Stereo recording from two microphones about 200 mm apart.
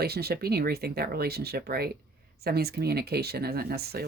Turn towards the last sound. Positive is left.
turn(degrees=-50)  # may be behind; listen again after turning